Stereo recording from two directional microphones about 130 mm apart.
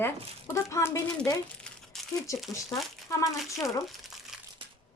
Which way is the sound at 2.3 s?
25° left (ahead or behind).